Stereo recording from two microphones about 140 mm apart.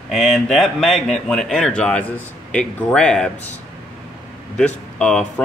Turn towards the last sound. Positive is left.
turn(degrees=5)  # may be behind; listen again after turning